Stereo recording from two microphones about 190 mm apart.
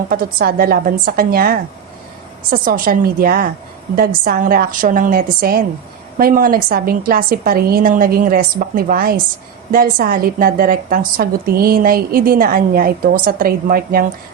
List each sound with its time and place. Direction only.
0.1 s a woman's voice: 50° right (ahead or behind)